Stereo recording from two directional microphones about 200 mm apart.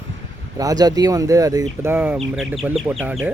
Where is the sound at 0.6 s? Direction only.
20° right (ahead or behind).